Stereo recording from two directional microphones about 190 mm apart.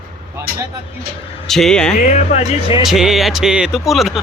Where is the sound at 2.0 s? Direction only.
35° left (ahead or behind).